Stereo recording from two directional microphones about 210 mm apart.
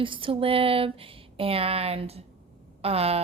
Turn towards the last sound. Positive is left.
turn(degrees=-30)  # may be behind; listen again after turning